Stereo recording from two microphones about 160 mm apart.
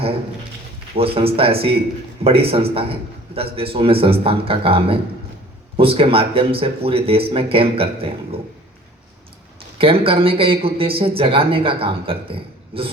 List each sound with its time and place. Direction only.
0.9 s speech: 35° right (ahead or behind)
9.7 s speech: 35° right (ahead or behind)